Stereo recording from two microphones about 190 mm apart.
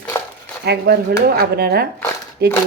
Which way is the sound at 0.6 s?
60° right (ahead or behind).